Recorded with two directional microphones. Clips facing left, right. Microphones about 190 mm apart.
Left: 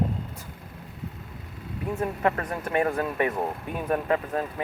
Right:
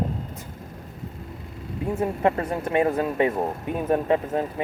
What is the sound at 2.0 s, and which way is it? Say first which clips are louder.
Speech: right 3 dB; 25° right (ahead or behind).